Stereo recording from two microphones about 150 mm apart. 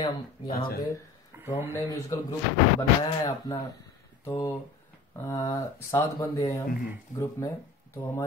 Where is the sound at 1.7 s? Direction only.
20° left (ahead or behind).